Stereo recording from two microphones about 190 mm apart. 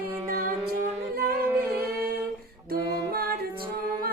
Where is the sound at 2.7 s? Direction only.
55° right (ahead or behind).